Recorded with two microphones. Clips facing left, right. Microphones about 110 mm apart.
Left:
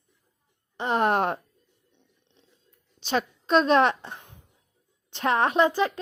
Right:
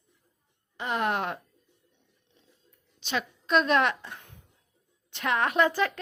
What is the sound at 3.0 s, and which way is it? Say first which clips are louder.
A woman's voice: left 5 dB; 35° left (ahead or behind).